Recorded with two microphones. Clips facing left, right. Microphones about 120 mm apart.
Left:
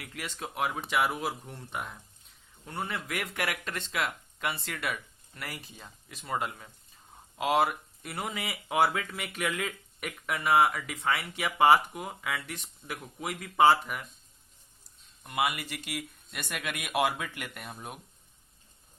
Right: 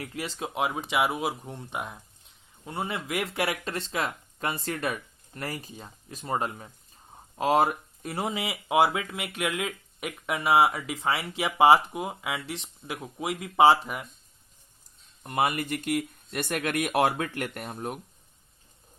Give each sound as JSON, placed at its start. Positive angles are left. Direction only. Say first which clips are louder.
{"t": 0.0, "sound": "speech", "louder": "right 6 dB", "side_deg": -35}
{"t": 0.3, "sound": "speech", "louder": "right 3 dB", "side_deg": -15}
{"t": 2.8, "sound": "speech", "louder": "right 5 dB", "side_deg": -25}
{"t": 8.3, "sound": "speech", "louder": "right 6 dB", "side_deg": -25}
{"t": 10.7, "sound": "speech", "louder": "right 2 dB", "side_deg": -25}
{"t": 15.2, "sound": "speech", "louder": "right 4 dB", "side_deg": -35}